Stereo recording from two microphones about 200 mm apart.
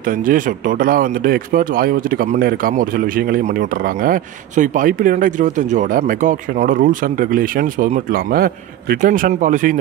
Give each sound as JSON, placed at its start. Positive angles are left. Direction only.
{"t": 0.0, "sound": "speech", "side_deg": -45}